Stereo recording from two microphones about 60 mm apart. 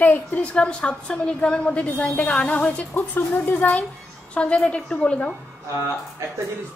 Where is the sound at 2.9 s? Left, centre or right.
Left.